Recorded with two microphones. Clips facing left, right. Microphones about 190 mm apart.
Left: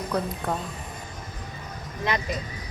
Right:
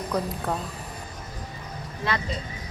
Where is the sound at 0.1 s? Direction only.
Centre (ahead or behind).